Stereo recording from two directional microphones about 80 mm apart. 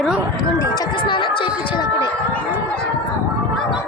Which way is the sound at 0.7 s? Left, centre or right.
Left.